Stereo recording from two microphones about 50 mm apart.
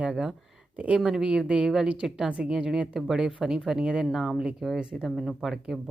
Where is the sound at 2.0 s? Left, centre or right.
Centre.